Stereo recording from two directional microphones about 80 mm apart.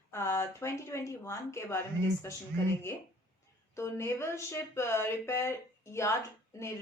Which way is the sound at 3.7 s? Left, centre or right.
Left.